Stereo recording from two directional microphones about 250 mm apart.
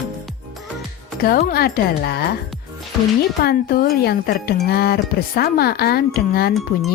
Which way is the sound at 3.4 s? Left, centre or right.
Left.